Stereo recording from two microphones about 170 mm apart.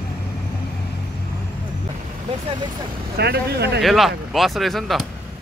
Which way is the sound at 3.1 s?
75° right (ahead or behind).